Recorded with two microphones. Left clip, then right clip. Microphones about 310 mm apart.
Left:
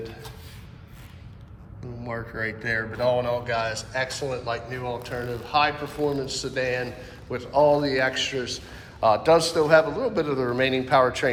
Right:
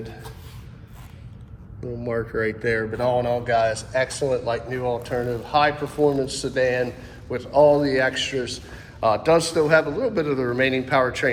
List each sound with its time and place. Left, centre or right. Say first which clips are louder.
2.0 s speech: right 6 dB; centre